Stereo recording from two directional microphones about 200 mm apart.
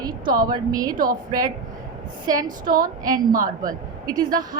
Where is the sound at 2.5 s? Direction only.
45° right (ahead or behind).